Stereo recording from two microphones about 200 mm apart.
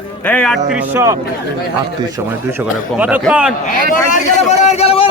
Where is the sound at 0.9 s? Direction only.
15° right (ahead or behind).